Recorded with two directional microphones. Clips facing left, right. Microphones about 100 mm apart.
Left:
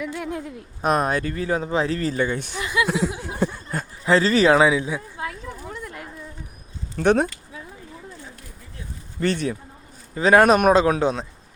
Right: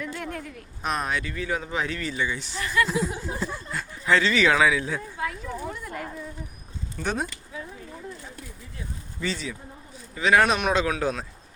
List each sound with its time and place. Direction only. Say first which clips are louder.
0.0 s speech: left 4 dB; 5° left (ahead or behind)
0.3 s speech: left 5 dB; 20° left (ahead or behind)
0.8 s speech: left 7 dB; 45° left (ahead or behind)
2.6 s speech: even; 15° left (ahead or behind)
2.8 s a sound: left 3 dB; 75° left (ahead or behind)
4.0 s speech: left 4 dB; 35° left (ahead or behind)
4.9 s speech: left 1 dB; 15° left (ahead or behind)
5.8 s insect: right 1 dB; centre (ahead or behind)
6.9 s speech: left 10 dB; 65° left (ahead or behind)
9.2 s speech: left 8 dB; 60° left (ahead or behind)
10.2 s speech: left 6 dB; 35° left (ahead or behind)